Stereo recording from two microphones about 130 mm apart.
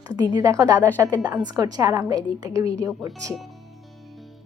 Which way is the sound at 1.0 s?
30° right (ahead or behind).